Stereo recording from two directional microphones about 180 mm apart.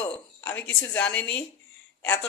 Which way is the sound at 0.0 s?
10° left (ahead or behind).